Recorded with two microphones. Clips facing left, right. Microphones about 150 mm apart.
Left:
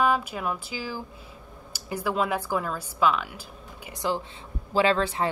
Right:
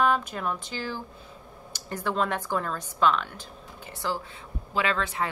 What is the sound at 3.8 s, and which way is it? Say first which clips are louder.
Speech: left 3 dB; 15° left (ahead or behind).